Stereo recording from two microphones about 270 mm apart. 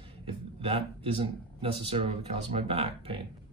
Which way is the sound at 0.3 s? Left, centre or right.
Right.